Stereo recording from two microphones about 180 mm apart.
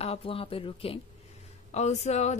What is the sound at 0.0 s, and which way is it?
A woman's voice, 30° left (ahead or behind).